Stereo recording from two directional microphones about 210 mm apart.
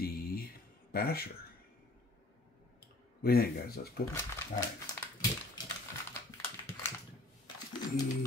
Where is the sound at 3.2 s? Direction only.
45° left (ahead or behind).